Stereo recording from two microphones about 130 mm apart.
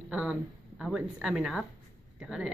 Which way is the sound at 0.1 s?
5° right (ahead or behind).